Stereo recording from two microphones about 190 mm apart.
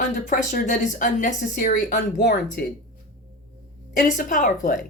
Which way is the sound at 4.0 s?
45° left (ahead or behind).